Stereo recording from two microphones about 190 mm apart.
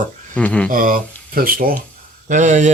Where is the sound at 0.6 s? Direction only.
45° right (ahead or behind).